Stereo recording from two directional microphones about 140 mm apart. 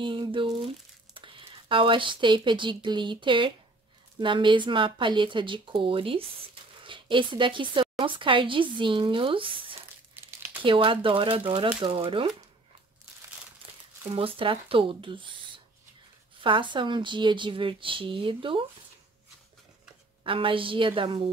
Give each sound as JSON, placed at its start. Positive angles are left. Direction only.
{"t": 0.0, "sound": "speech", "side_deg": -35}
{"t": 14.1, "sound": "speech", "side_deg": -40}
{"t": 20.2, "sound": "speech", "side_deg": -40}